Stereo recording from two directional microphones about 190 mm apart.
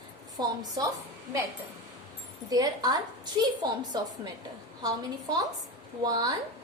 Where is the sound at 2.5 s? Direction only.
20° right (ahead or behind).